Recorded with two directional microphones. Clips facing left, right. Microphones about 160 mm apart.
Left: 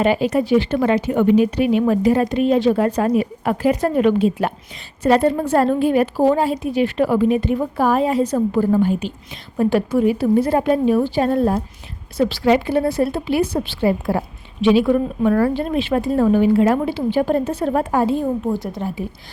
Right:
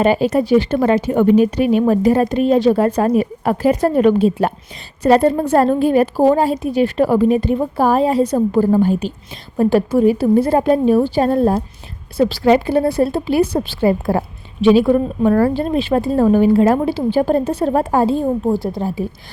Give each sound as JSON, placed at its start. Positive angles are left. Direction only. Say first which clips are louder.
{"t": 0.0, "sound": "a woman's voice", "louder": "right 3 dB", "side_deg": -40}